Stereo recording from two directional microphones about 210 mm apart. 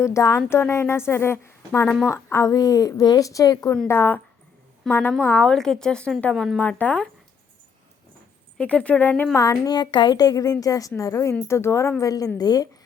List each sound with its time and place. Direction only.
0.0 s a woman's voice: 15° left (ahead or behind)
8.5 s a woman's voice: 5° left (ahead or behind)